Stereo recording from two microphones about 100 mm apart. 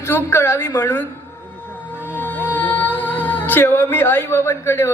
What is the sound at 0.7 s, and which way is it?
Speech, 25° left (ahead or behind).